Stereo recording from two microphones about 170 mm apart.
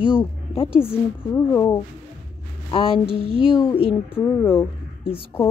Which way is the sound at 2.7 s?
35° left (ahead or behind).